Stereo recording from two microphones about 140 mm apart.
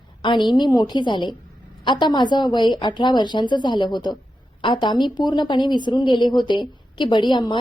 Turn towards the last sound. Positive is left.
turn(degrees=35)  # may be behind; listen again after turning